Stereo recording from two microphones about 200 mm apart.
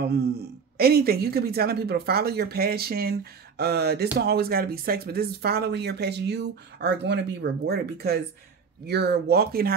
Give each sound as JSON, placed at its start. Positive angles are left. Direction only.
{"t": 0.0, "sound": "speech", "side_deg": -55}